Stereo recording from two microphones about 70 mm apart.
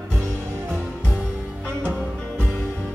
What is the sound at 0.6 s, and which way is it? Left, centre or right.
Music, right.